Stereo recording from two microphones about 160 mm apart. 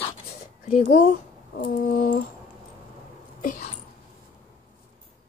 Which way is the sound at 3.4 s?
55° left (ahead or behind).